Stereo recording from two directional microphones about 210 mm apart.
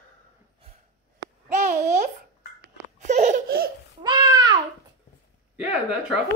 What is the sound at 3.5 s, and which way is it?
Laughter, 45° right (ahead or behind).